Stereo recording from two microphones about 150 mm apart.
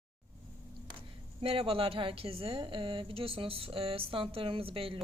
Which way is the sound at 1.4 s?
40° right (ahead or behind).